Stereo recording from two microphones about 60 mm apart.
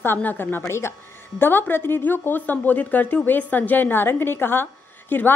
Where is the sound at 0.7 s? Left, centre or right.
Left.